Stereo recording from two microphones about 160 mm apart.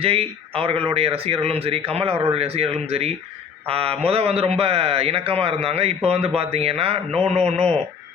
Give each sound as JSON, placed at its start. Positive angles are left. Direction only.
{"t": 0.0, "sound": "a man's voice", "side_deg": -35}
{"t": 7.5, "sound": "speech", "side_deg": 5}